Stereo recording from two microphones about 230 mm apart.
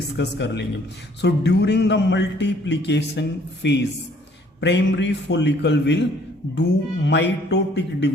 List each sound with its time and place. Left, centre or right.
0.2 s a man's voice: left